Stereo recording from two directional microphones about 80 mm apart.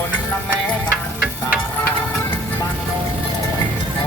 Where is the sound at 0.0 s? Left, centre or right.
Left.